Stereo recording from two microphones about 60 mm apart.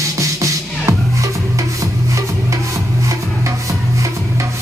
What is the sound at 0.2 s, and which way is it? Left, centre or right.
Music, right.